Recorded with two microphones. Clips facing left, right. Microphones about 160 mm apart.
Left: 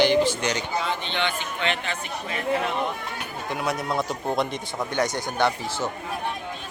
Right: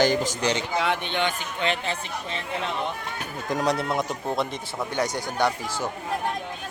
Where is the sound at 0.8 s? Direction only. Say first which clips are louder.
Right 3 dB; 70° right (ahead or behind).